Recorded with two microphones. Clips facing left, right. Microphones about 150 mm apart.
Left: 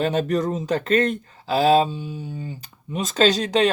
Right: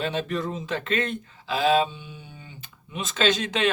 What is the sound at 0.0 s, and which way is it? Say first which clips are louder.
Speech: left 6 dB; 45° left (ahead or behind).